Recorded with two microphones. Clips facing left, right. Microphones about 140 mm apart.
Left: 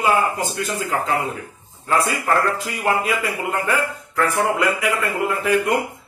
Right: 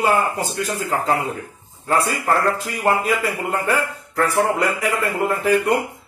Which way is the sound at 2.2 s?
35° right (ahead or behind).